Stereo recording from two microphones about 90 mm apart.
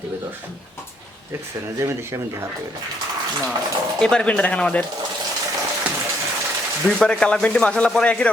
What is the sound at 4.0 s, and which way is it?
Speech, 10° left (ahead or behind).